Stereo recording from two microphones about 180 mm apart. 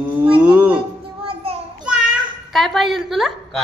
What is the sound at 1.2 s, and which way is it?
Child singing, 30° right (ahead or behind).